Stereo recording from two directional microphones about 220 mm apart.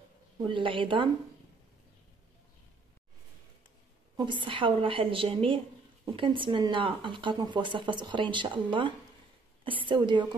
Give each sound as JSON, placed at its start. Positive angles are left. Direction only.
{"t": 0.5, "sound": "speech", "side_deg": -25}
{"t": 4.2, "sound": "speech", "side_deg": -20}